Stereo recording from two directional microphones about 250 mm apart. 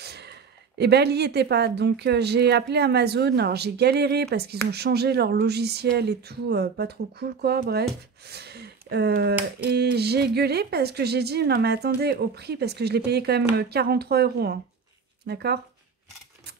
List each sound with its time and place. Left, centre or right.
0.0 s speech: right